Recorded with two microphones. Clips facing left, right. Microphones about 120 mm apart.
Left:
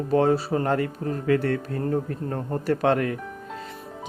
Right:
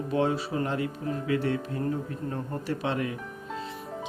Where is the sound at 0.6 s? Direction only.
50° left (ahead or behind).